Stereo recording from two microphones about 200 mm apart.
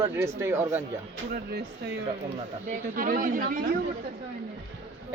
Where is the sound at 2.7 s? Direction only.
45° right (ahead or behind).